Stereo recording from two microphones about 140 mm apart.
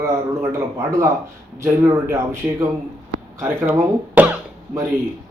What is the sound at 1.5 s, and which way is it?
Speech, 20° right (ahead or behind).